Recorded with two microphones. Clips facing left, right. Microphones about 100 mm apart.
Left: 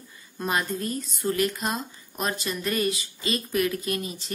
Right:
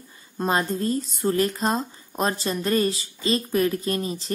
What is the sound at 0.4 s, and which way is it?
Speech, 30° right (ahead or behind).